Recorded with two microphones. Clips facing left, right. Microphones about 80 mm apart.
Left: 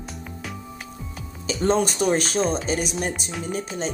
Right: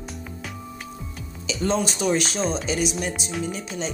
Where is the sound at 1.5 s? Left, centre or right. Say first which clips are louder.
Left 3 dB; left.